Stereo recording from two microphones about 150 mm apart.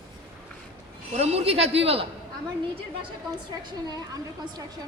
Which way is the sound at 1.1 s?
45° right (ahead or behind).